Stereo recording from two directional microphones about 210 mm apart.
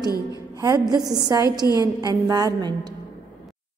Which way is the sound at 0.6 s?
15° right (ahead or behind).